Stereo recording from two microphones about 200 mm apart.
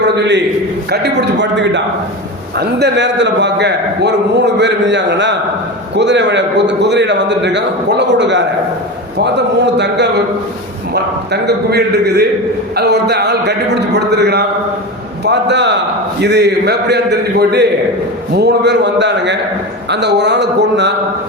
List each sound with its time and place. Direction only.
0.9 s a man's voice: 55° right (ahead or behind)